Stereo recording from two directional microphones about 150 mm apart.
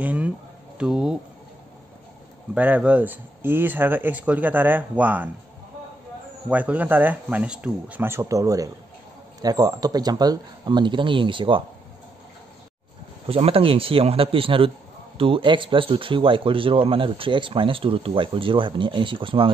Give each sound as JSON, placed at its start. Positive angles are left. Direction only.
{"t": 0.0, "sound": "a sound", "side_deg": -10}
{"t": 0.7, "sound": "speech", "side_deg": -5}
{"t": 2.5, "sound": "speech", "side_deg": -10}
{"t": 6.5, "sound": "speech", "side_deg": -10}
{"t": 13.3, "sound": "speech", "side_deg": -40}